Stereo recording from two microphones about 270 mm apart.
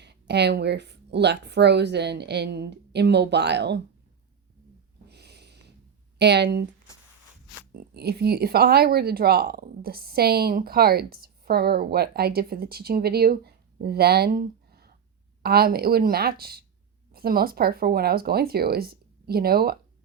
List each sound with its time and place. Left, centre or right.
0.0 s speech: right
5.0 s a sound: right
6.1 s speech: right
7.7 s speech: right